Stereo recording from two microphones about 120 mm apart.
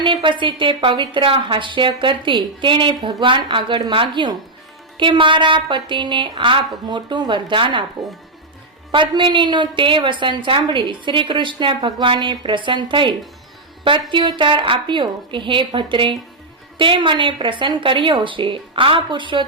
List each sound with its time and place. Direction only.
0.0 s a woman's voice: 40° right (ahead or behind)
8.9 s a woman's voice: 40° right (ahead or behind)